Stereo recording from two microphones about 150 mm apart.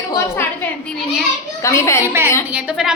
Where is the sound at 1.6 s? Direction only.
20° left (ahead or behind).